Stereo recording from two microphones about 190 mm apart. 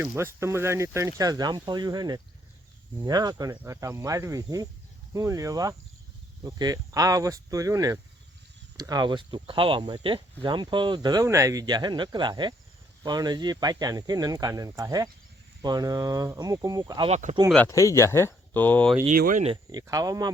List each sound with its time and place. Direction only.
0.0 s speech: 15° right (ahead or behind)
17.1 s speech: 40° right (ahead or behind)
17.7 s speech: 15° left (ahead or behind)
19.0 s speech: 45° right (ahead or behind)
19.5 s speech: 20° right (ahead or behind)